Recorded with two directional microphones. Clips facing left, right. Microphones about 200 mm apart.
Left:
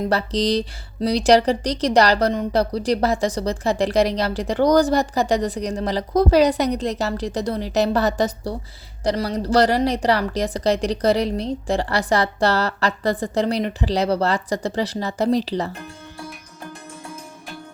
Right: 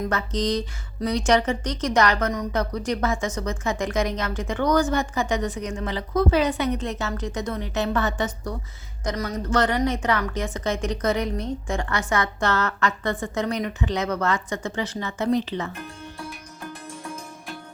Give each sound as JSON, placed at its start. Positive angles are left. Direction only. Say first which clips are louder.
{"t": 0.1, "sound": "a woman's voice", "louder": "left 4 dB", "side_deg": 35}